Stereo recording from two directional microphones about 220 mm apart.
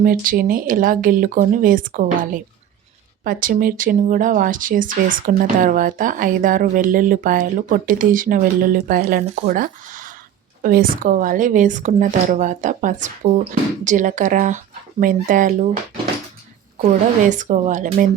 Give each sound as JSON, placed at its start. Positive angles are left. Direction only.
{"t": 0.0, "sound": "speech", "side_deg": -40}
{"t": 16.7, "sound": "speech", "side_deg": -35}